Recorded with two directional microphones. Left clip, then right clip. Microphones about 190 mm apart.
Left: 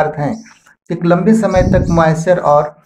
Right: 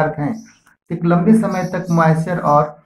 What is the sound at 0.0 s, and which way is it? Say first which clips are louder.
Speech: left 3 dB; 45° left (ahead or behind).